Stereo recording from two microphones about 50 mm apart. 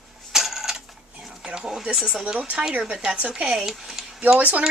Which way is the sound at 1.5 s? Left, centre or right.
Centre.